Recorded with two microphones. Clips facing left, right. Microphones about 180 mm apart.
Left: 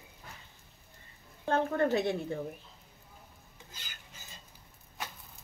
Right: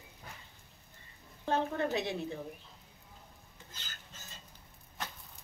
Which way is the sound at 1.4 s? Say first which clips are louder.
Left 4 dB; 50° left (ahead or behind).